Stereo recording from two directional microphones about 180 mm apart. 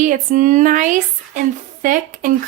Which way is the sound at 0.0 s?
45° right (ahead or behind).